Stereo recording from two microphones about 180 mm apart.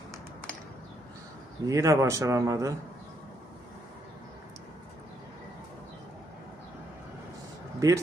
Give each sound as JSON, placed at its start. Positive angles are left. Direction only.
{"t": 1.6, "sound": "a man's voice", "side_deg": -20}
{"t": 7.8, "sound": "speech", "side_deg": -20}